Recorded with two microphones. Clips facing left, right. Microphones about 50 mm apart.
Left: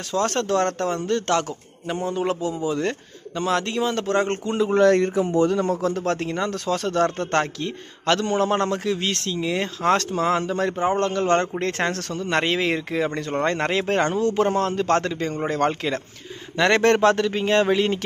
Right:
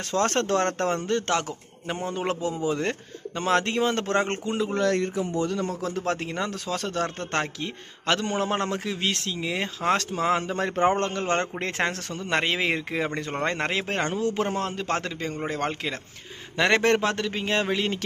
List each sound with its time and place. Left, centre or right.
0.1 s speech: right
1.0 s a man's voice: centre
4.8 s speech: left
5.8 s speech: centre
10.8 s a man's voice: right; by 17.9 s centre